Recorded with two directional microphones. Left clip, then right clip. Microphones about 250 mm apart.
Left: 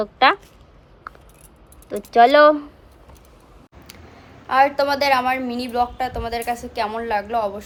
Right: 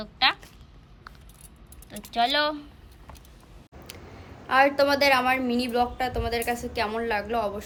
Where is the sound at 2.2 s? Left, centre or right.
Centre.